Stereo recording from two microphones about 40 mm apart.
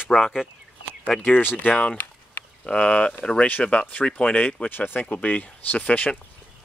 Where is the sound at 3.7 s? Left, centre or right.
Left.